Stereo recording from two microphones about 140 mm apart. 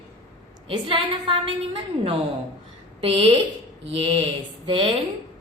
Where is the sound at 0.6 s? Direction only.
40° right (ahead or behind).